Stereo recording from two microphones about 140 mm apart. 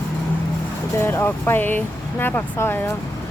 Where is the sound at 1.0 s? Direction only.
15° left (ahead or behind).